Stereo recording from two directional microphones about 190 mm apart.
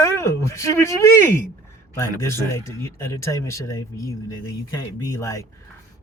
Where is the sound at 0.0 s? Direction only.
15° left (ahead or behind).